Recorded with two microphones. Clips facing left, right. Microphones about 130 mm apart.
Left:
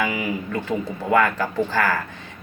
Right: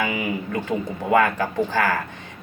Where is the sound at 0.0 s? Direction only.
20° right (ahead or behind).